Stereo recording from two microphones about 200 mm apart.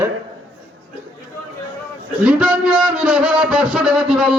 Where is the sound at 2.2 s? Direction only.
5° right (ahead or behind).